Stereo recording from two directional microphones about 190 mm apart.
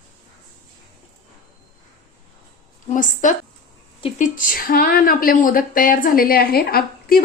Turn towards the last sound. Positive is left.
turn(degrees=50)  # may be behind; listen again after turning